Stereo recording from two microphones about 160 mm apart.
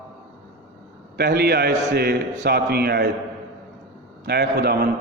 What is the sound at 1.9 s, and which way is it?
A man's voice, 80° right.